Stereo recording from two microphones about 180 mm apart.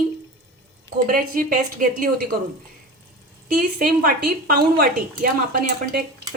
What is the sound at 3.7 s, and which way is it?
Speech, 55° right (ahead or behind).